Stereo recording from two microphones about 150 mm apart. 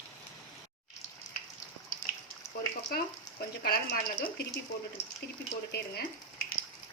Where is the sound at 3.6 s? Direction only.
85° left.